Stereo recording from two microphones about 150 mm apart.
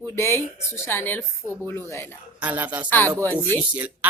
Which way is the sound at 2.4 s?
10° right (ahead or behind).